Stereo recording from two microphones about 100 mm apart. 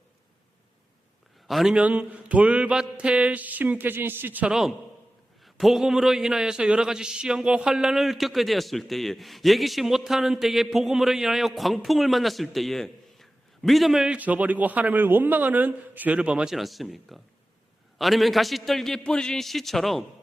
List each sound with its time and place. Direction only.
1.5 s a man's voice: 5° right (ahead or behind)
5.5 s a man's voice: centre (ahead or behind)
14.2 s a man's voice: 15° right (ahead or behind); by 20.1 s centre (ahead or behind)